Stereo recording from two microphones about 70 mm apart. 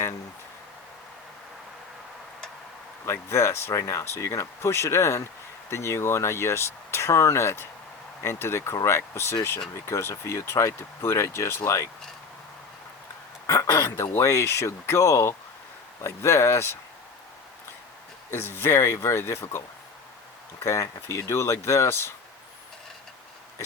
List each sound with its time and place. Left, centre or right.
3.1 s speech: left
13.5 s a sound: left
13.8 s speech: left
18.3 s speech: left
20.7 s speech: left